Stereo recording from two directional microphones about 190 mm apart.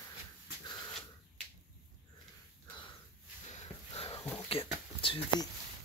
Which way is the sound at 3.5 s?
35° left (ahead or behind).